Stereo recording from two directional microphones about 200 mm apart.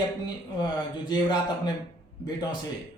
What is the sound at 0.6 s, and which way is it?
Speech, 20° left (ahead or behind).